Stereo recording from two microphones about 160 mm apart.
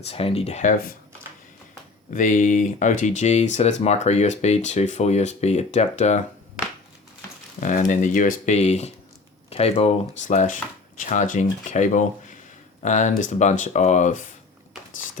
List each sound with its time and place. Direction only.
0.0 s speech: 40° left (ahead or behind)
2.0 s speech: 55° left (ahead or behind)
7.6 s speech: 55° left (ahead or behind)